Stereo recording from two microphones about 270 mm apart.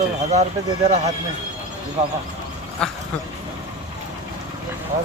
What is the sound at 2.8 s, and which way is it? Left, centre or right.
Speech, centre.